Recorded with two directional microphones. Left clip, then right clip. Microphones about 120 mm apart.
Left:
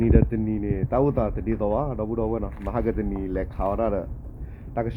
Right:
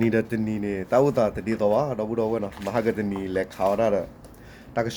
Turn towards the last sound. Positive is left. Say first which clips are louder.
# right 2 dB
turn(degrees=-20)  # may be behind; listen again after turning